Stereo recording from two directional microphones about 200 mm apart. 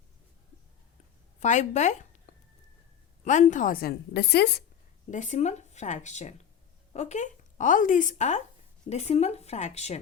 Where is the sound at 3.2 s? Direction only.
35° left (ahead or behind); by 4.6 s 55° left (ahead or behind).